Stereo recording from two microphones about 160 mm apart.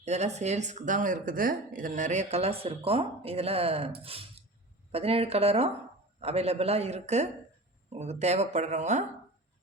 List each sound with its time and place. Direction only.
0.0 s speech: 45° right (ahead or behind)